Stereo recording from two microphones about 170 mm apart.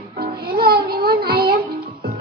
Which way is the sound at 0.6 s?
60° right (ahead or behind).